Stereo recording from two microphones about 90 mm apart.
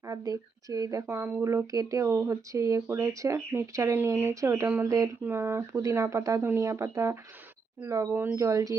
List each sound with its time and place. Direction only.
0.0 s speech: 40° right (ahead or behind)
2.0 s speech: 25° right (ahead or behind)
3.9 s speech: 25° right (ahead or behind); by 5.0 s 40° right (ahead or behind)
5.2 s speech: 25° right (ahead or behind)